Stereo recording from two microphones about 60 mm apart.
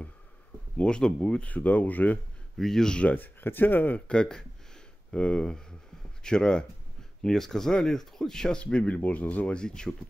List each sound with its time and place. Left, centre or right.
0.7 s speech: centre
2.5 s speech: centre
3.1 s speech: left
4.1 s speech: centre